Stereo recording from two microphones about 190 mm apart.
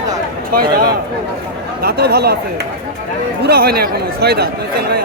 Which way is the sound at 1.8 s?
55° right (ahead or behind).